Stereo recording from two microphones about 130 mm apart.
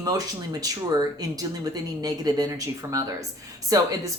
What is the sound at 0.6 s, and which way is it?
Speech, 30° right (ahead or behind).